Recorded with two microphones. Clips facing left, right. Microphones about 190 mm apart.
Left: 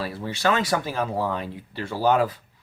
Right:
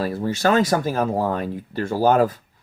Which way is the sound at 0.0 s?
45° right (ahead or behind).